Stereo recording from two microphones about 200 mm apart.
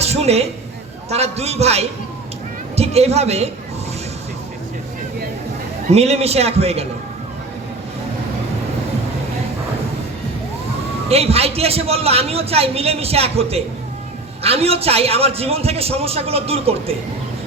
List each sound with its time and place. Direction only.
0.0 s a woman's voice: 30° right (ahead or behind)
5.9 s a man's voice: 30° right (ahead or behind)
11.1 s a man's voice: 30° right (ahead or behind)